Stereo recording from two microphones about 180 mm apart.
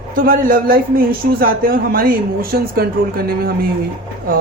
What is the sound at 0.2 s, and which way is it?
A man's voice, 50° right (ahead or behind).